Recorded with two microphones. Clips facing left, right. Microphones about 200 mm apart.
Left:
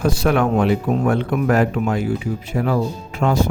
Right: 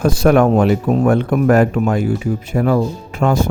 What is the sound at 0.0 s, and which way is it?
Speech, 45° right (ahead or behind).